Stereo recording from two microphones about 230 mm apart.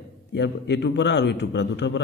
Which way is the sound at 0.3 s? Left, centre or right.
Left.